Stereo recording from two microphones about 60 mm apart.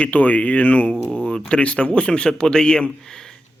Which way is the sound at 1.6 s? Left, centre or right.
Left.